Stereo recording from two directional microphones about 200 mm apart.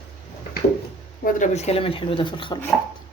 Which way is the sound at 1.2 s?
35° left (ahead or behind).